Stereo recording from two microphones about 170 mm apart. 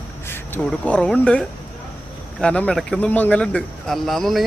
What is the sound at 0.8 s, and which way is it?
Speech, 5° left (ahead or behind).